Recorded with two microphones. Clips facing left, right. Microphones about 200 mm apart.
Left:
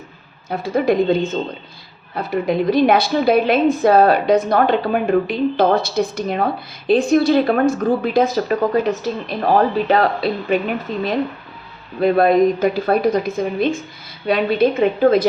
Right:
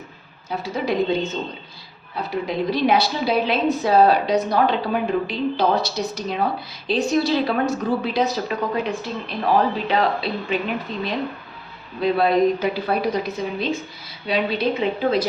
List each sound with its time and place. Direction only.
0.5 s a woman's voice: 50° left (ahead or behind)
11.9 s a woman's voice: 50° left (ahead or behind)